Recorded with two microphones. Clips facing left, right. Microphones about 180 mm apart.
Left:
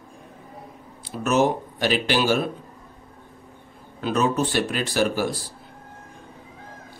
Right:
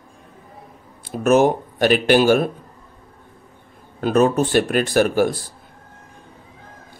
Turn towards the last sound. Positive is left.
turn(degrees=-50)  # may be behind; listen again after turning